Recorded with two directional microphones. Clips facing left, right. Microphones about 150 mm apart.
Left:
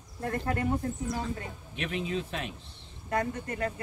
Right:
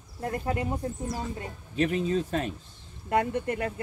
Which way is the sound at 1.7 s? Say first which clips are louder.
Right 7 dB; 35° right (ahead or behind).